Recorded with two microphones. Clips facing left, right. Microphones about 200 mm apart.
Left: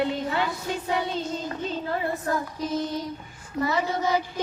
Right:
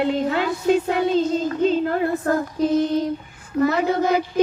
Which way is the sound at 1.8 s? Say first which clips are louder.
Right 7 dB; 60° right (ahead or behind).